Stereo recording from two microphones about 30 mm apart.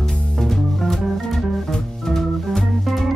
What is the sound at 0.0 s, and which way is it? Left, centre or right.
Music, centre.